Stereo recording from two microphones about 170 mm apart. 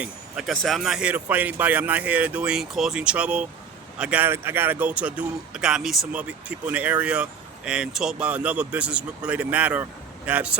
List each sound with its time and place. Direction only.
0.0 s speech: 5° right (ahead or behind)